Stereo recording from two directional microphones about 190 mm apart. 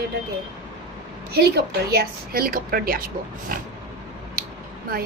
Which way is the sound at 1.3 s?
55° right (ahead or behind).